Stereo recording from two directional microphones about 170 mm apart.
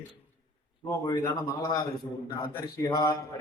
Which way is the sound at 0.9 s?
15° left (ahead or behind).